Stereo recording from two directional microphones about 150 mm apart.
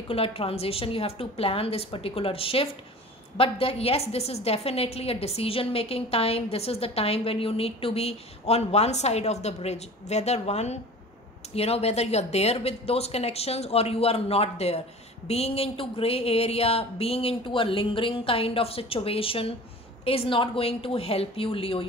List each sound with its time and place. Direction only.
0.1 s a woman's voice: 40° left (ahead or behind)